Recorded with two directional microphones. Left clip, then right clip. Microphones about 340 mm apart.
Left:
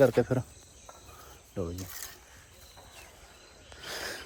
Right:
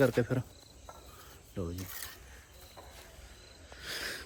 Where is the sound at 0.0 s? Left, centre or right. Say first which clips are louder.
Left 5 dB; centre.